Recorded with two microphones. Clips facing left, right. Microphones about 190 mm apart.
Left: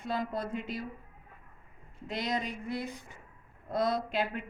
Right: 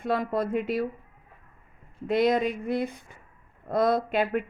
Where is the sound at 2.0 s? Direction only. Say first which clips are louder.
Right 11 dB; 55° right (ahead or behind).